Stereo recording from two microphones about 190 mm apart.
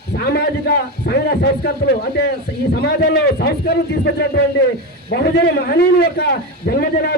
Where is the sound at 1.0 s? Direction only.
60° left (ahead or behind).